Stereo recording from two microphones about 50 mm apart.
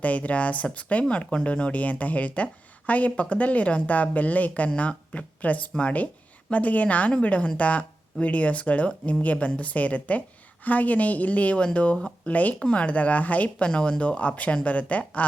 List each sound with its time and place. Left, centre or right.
0.0 s a woman's voice: left
12.3 s a woman's voice: left
12.5 s a woman's voice: left
13.7 s a woman's voice: centre